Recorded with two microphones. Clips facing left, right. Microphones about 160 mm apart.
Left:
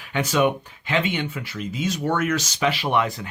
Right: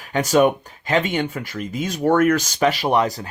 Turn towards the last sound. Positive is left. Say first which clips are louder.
# right 4 dB
turn(degrees=-40)  # may be behind; listen again after turning